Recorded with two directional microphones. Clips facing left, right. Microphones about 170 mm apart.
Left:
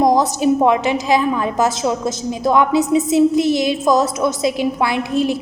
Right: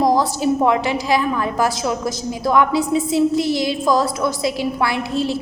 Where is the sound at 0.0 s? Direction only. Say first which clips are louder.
Left 2 dB; 20° left (ahead or behind).